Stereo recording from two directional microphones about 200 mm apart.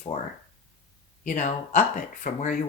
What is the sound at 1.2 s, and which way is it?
Speech, 35° left (ahead or behind).